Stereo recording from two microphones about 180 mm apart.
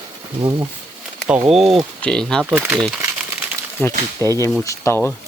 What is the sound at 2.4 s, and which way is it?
Speech, 10° right (ahead or behind).